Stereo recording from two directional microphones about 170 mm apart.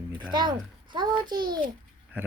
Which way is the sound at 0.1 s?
25° right (ahead or behind).